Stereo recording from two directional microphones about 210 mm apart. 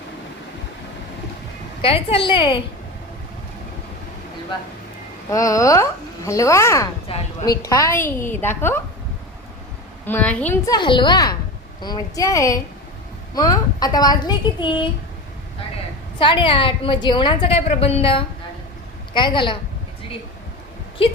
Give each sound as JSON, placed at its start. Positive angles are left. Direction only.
{"t": 1.8, "sound": "a woman's voice", "side_deg": 25}
{"t": 5.3, "sound": "a child's voice", "side_deg": 15}
{"t": 7.1, "sound": "a woman's voice", "side_deg": 25}
{"t": 7.6, "sound": "a child's voice", "side_deg": 15}
{"t": 10.1, "sound": "a child's voice", "side_deg": 5}
{"t": 10.7, "sound": "a woman's voice", "side_deg": 20}
{"t": 16.1, "sound": "a woman's voice", "side_deg": 25}